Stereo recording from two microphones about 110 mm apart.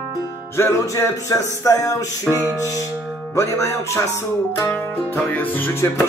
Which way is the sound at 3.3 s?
25° left (ahead or behind).